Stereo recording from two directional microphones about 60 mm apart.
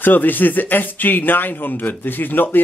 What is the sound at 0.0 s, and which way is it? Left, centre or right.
Speech, left.